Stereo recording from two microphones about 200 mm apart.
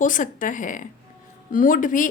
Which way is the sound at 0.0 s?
40° left (ahead or behind).